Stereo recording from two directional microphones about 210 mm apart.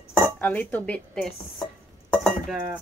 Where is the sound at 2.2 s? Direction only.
Centre (ahead or behind).